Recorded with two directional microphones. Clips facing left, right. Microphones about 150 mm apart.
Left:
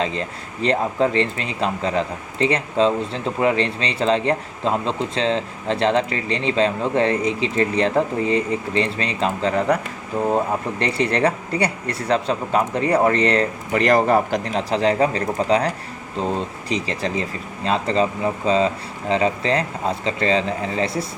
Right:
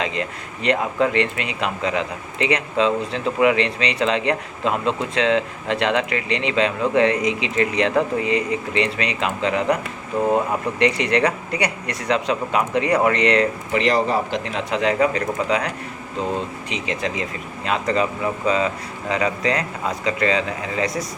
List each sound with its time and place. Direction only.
0.0 s speech: 35° left (ahead or behind)
10.8 s speech: 35° left (ahead or behind)